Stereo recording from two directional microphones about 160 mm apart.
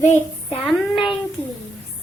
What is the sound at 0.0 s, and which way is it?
Child singing, 45° left (ahead or behind).